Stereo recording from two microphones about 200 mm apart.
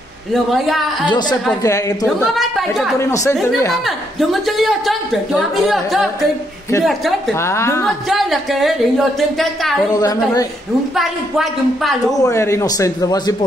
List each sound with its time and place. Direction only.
0.3 s speech: centre (ahead or behind)
1.6 s a man's voice: 15° left (ahead or behind)
2.3 s speech: centre (ahead or behind)
3.0 s a man's voice: 15° left (ahead or behind)
3.8 s speech: centre (ahead or behind)
7.3 s a man's voice: 15° left (ahead or behind)
7.8 s speech: centre (ahead or behind)
9.9 s a man's voice: 20° left (ahead or behind)
11.0 s speech: centre (ahead or behind)
12.1 s a man's voice: 15° left (ahead or behind)